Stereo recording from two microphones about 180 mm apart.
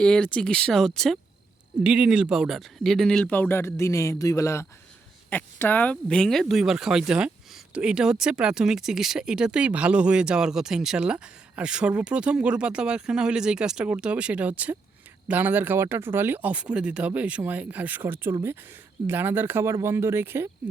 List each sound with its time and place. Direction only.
0.0 s speech: 5° left (ahead or behind); by 20.5 s 15° right (ahead or behind)